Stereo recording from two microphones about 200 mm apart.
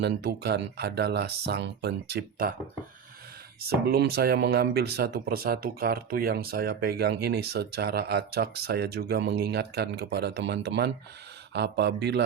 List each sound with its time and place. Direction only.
0.0 s speech: 55° right (ahead or behind)
3.6 s speech: 50° right (ahead or behind)